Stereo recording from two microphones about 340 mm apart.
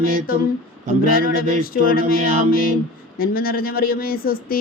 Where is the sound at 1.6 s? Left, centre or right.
Left.